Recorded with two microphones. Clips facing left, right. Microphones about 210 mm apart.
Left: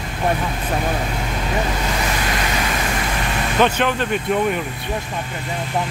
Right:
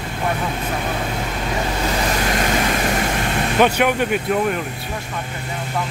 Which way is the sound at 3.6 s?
10° right (ahead or behind).